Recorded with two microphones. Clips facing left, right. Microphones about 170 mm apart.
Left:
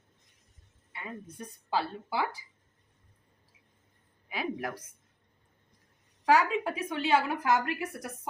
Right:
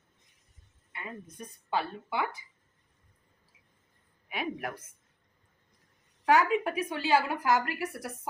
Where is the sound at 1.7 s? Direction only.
30° left (ahead or behind).